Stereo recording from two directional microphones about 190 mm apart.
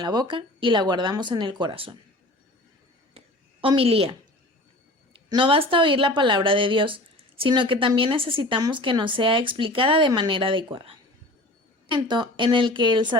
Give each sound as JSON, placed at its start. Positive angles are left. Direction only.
{"t": 0.0, "sound": "speech", "side_deg": -20}
{"t": 3.2, "sound": "a sound", "side_deg": -30}
{"t": 5.1, "sound": "speech", "side_deg": -25}